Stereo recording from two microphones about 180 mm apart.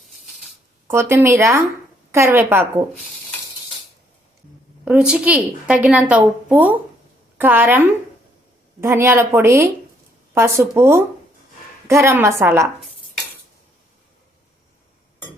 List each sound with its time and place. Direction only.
0.9 s a woman's voice: 15° right (ahead or behind)
4.9 s a woman's voice: 5° right (ahead or behind)